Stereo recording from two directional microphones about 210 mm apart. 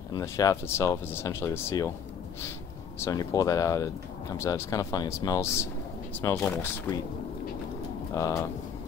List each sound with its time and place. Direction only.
0.1 s speech: 15° left (ahead or behind)
3.0 s speech: 15° left (ahead or behind)
8.1 s speech: 15° left (ahead or behind)